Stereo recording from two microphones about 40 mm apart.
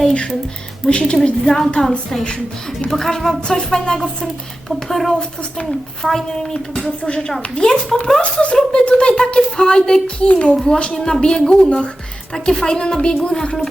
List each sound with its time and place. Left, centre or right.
0.9 s speech: left
2.9 s speech: centre
8.2 s a child's voice: left
10.9 s speech: centre